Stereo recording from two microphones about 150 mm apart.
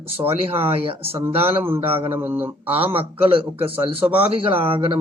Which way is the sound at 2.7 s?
40° right (ahead or behind).